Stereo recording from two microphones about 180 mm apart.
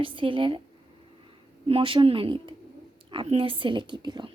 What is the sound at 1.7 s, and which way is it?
Speech, 30° right (ahead or behind).